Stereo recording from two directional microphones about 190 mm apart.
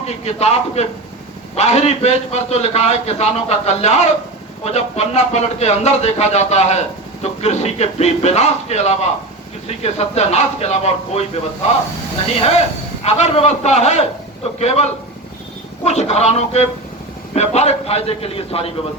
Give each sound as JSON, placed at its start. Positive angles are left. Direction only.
{"t": 0.3, "sound": "speech", "side_deg": 35}
{"t": 12.4, "sound": "speech", "side_deg": 35}